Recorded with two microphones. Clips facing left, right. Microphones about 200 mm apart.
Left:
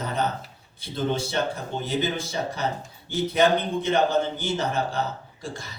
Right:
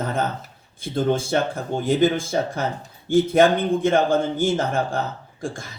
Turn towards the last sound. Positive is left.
turn(degrees=-50)  # may be behind; listen again after turning